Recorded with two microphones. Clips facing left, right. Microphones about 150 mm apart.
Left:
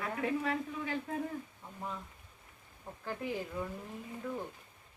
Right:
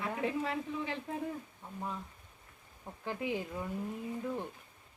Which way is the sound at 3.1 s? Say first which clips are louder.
Right 2 dB; 15° right (ahead or behind).